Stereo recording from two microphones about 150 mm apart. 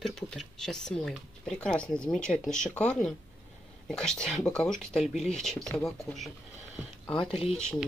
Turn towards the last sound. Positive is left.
turn(degrees=40)  # may be behind; listen again after turning